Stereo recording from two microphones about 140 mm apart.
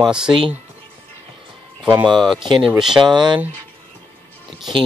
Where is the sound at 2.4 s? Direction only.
35° right (ahead or behind).